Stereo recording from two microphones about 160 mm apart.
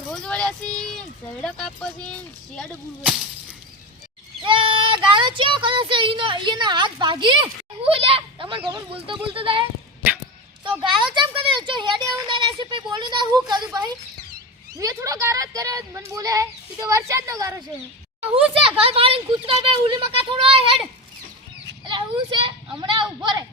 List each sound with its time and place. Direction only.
0.1 s speech: 5° left (ahead or behind)
4.4 s a woman's voice: 35° right (ahead or behind)
14.8 s speech: 20° right (ahead or behind)
18.6 s speech: 35° right (ahead or behind)
21.8 s speech: 30° right (ahead or behind)